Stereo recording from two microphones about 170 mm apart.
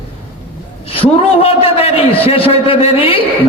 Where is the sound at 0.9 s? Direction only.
35° left (ahead or behind).